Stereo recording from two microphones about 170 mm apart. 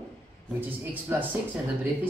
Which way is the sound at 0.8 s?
10° right (ahead or behind).